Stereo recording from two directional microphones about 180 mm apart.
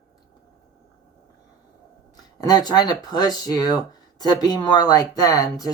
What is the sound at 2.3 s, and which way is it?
Speech, 20° left (ahead or behind).